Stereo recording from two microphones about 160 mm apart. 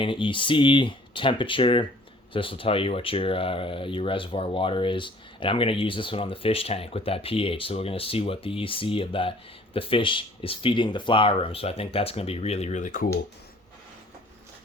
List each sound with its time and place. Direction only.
0.0 s speech: 30° left (ahead or behind); by 13.1 s 55° left (ahead or behind)